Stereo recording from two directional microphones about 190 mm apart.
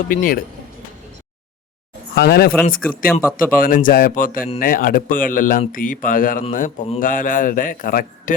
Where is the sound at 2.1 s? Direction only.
55° left (ahead or behind).